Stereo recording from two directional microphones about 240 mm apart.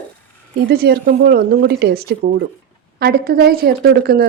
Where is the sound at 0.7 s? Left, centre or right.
Right.